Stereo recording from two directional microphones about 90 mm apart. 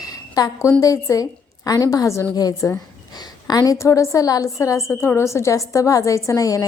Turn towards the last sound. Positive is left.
turn(degrees=40)  # may be behind; listen again after turning